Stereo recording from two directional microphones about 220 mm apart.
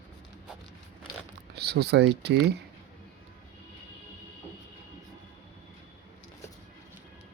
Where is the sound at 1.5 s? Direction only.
45° right (ahead or behind).